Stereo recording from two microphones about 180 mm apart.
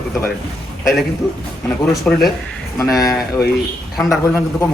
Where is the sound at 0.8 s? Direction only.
Centre (ahead or behind).